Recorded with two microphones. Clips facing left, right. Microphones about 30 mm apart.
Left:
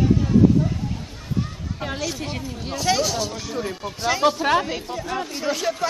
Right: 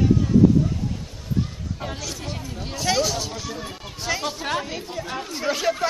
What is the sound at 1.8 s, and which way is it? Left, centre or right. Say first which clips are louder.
Speech: left 6 dB; centre.